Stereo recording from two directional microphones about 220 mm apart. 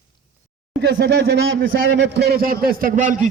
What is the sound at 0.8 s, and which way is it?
A man's voice, 50° right (ahead or behind).